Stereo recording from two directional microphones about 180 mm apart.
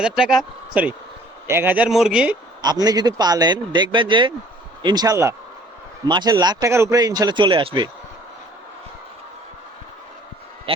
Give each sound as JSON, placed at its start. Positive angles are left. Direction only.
{"t": 0.0, "sound": "speech", "side_deg": -5}
{"t": 2.6, "sound": "speech", "side_deg": -20}